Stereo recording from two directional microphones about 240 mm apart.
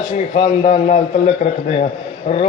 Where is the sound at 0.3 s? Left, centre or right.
Left.